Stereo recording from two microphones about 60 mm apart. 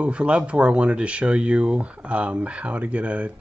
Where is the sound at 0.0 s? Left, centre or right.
Right.